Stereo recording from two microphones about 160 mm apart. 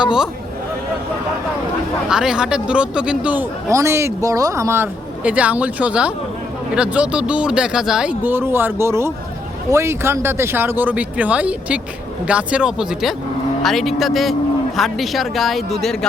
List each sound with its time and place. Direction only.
0.0 s speech: 5° right (ahead or behind)
2.0 s speech: 5° right (ahead or behind)
3.7 s speech: 20° right (ahead or behind); by 16.0 s centre (ahead or behind)